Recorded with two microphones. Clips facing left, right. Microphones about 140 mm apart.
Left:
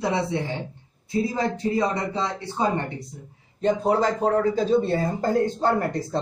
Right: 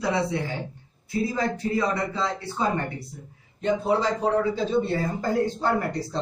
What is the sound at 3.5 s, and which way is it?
A man's voice, 45° left (ahead or behind).